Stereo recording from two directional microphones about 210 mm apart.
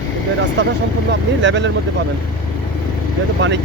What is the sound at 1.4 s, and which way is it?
Speech, 60° right (ahead or behind).